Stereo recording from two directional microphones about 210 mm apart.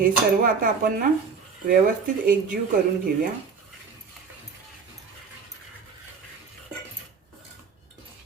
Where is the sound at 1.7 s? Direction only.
40° right (ahead or behind).